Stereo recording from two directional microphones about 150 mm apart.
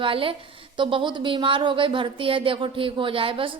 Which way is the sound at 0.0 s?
35° right (ahead or behind).